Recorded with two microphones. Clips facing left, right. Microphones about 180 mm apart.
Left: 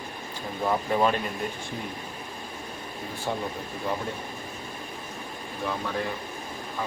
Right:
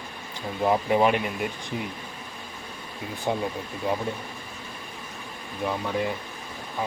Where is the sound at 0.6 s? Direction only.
15° right (ahead or behind).